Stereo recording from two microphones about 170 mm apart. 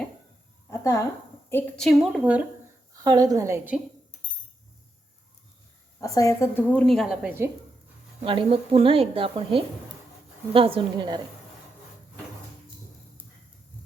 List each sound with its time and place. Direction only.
0.7 s a sound: 20° left (ahead or behind)
1.5 s a woman's voice: 10° left (ahead or behind)
3.0 s a woman's voice: 20° right (ahead or behind)
6.0 s a woman's voice: 20° left (ahead or behind); by 7.5 s 10° right (ahead or behind)
8.2 s a woman's voice: 30° right (ahead or behind)